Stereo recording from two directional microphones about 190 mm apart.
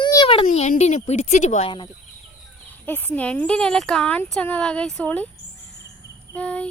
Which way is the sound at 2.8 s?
10° left (ahead or behind).